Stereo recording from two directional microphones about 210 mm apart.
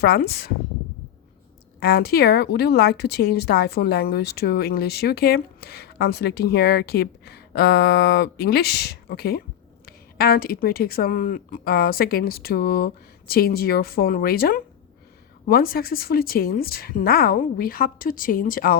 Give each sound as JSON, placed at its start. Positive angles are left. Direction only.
{"t": 0.0, "sound": "a woman's voice", "side_deg": 45}
{"t": 1.8, "sound": "a woman's voice", "side_deg": 45}